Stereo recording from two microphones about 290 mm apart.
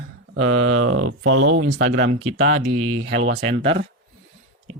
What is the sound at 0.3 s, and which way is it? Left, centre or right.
Speech, right.